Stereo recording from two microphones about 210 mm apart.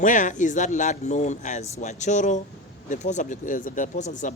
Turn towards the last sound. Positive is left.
turn(degrees=35)  # may be behind; listen again after turning